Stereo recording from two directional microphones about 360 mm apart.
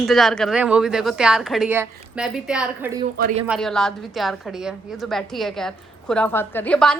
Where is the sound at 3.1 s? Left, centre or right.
Right.